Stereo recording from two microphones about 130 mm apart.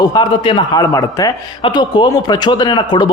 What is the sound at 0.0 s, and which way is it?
Speech, 30° left (ahead or behind).